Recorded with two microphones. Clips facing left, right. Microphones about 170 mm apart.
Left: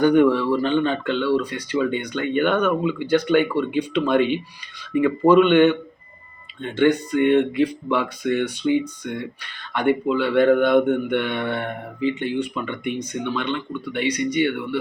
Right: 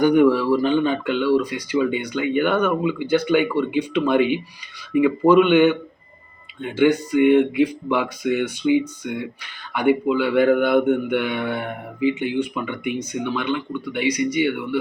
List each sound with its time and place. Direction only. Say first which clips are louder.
0.0 s speech: right 1 dB; 10° right (ahead or behind)